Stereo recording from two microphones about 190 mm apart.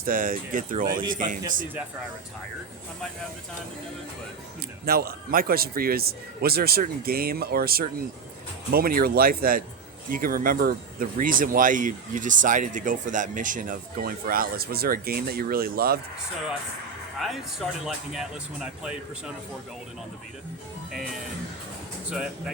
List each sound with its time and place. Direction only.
0.0 s speech: 45° right (ahead or behind)
4.9 s speech: 55° right (ahead or behind)
17.2 s speech: centre (ahead or behind)
22.1 s speech: 5° right (ahead or behind)